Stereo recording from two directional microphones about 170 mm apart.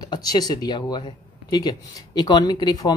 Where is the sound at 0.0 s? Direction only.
25° left (ahead or behind).